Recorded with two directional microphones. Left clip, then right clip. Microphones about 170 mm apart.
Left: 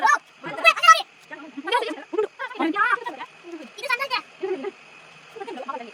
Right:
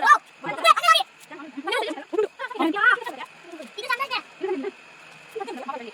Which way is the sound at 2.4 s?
5° right (ahead or behind).